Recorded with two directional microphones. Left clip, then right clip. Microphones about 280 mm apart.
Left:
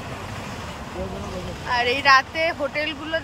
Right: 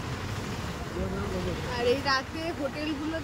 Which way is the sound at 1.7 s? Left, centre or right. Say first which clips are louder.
Left 10 dB; centre.